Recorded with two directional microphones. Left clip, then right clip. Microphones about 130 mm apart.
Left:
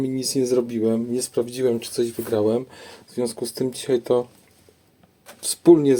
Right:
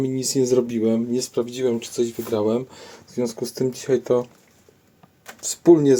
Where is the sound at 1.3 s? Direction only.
15° left (ahead or behind).